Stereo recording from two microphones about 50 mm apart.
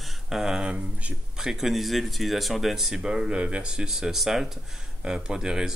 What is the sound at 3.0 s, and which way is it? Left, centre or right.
A man's voice, centre.